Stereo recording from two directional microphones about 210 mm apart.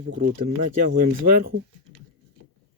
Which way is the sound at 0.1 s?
45° right (ahead or behind).